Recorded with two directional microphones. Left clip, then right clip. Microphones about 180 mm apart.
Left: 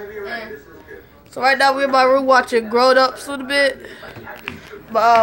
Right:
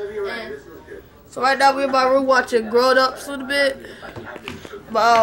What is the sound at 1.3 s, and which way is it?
Speech, 45° left (ahead or behind).